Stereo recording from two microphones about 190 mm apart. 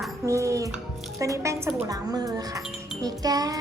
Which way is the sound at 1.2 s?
15° right (ahead or behind).